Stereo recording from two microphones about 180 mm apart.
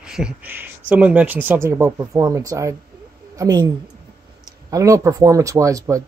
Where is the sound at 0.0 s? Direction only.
5° right (ahead or behind).